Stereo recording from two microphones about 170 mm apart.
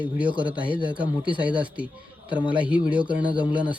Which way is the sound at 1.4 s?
10° right (ahead or behind).